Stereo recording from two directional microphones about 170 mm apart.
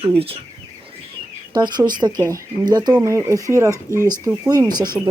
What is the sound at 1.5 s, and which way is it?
Speech, 25° right (ahead or behind).